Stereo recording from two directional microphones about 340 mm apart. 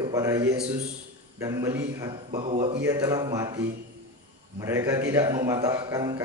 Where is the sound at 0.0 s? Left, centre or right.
Centre.